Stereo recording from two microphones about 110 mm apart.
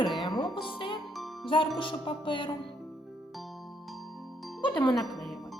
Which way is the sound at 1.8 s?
50° left (ahead or behind).